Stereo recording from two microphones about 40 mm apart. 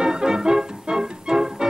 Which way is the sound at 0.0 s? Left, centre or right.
Centre.